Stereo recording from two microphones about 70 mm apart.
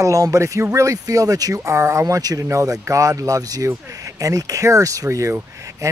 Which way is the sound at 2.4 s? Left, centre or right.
Right.